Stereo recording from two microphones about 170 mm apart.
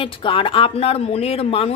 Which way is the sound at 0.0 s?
30° left (ahead or behind).